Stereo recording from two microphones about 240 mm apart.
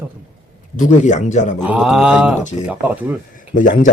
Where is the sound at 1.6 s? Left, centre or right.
Centre.